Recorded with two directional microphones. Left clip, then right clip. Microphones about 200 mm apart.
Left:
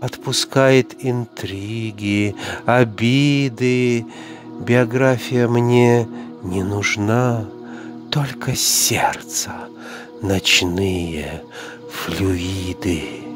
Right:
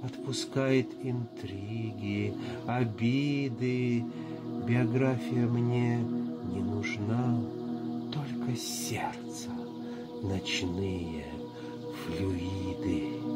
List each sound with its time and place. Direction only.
0.0 s speech: 50° left (ahead or behind)